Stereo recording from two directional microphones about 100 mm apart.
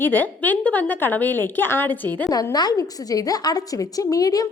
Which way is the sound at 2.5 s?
40° left (ahead or behind).